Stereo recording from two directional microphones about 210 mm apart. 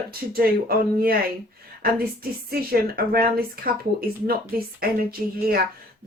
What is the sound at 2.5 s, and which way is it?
Speech, 45° right (ahead or behind).